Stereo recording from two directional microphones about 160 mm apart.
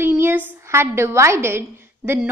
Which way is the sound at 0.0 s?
15° right (ahead or behind).